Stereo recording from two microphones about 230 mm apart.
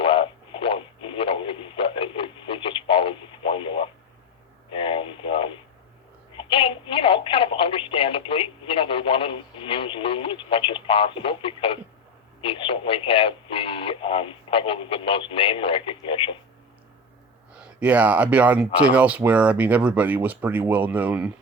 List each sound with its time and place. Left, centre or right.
0.0 s a sound: left
6.3 s telephone: left
12.4 s radio: left
17.6 s speech: centre